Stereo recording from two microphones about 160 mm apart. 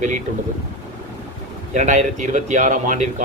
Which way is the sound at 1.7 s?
50° right (ahead or behind).